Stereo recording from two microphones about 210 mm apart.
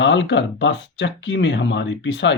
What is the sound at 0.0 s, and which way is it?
Speech, 60° left (ahead or behind).